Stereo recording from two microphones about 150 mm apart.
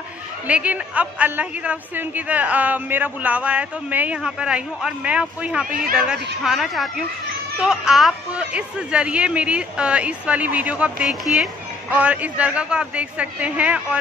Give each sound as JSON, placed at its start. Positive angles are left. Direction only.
{"t": 0.5, "sound": "a woman's voice", "side_deg": -10}